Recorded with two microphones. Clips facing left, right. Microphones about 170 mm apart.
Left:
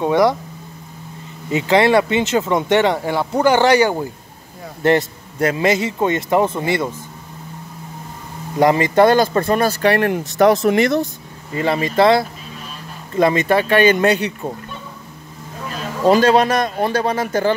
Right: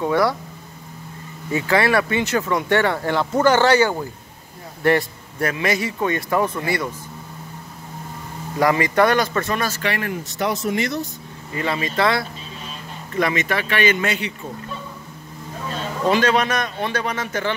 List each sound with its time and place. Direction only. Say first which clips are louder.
0.0 s speech: left 4 dB; 20° left (ahead or behind)
1.5 s speech: left 5 dB; 20° left (ahead or behind)
8.5 s a man's voice: left 4 dB; 25° left (ahead or behind)
9.9 s speech: left 9 dB; 65° left (ahead or behind)
11.5 s a man's voice: left 6 dB; 30° left (ahead or behind)
16.1 s a man's voice: left 6 dB; 35° left (ahead or behind)